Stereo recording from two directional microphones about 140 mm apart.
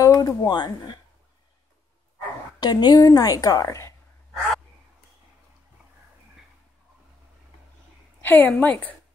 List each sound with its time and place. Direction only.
0.0 s speech: 25° left (ahead or behind)
2.6 s a woman's voice: 30° left (ahead or behind)
8.2 s a woman's voice: 15° left (ahead or behind)